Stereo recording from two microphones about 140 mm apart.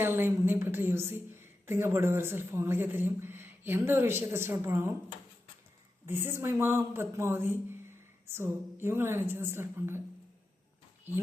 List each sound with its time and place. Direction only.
0.0 s a woman's voice: 15° right (ahead or behind)
6.1 s a woman's voice: 15° right (ahead or behind)